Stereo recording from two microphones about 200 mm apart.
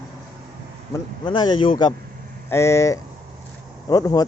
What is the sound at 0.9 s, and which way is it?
Speech, 25° left (ahead or behind).